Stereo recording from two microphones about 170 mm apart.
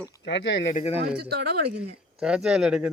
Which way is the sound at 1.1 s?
65° right (ahead or behind).